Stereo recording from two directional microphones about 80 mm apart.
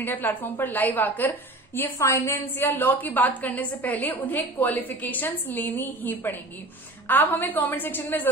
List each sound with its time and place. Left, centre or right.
0.0 s a woman's voice: left